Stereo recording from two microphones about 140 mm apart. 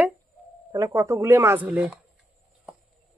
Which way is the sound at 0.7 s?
25° right (ahead or behind).